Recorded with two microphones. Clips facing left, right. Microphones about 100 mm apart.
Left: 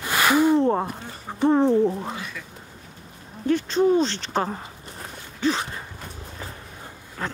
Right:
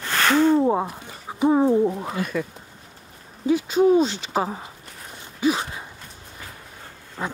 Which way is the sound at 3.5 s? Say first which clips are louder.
Right 2 dB; 10° right (ahead or behind).